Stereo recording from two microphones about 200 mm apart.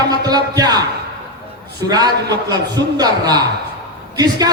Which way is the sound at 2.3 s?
20° right (ahead or behind).